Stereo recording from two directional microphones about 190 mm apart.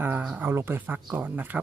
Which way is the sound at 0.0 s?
10° right (ahead or behind).